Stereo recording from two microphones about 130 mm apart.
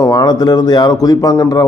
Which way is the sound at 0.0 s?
30° left (ahead or behind).